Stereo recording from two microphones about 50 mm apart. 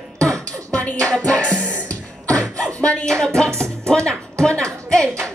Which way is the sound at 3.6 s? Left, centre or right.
Centre.